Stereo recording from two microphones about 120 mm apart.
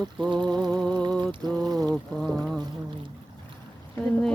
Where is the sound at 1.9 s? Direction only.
5° left (ahead or behind).